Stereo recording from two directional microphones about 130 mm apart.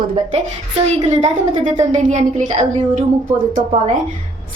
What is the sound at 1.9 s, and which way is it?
Speech, 70° right (ahead or behind).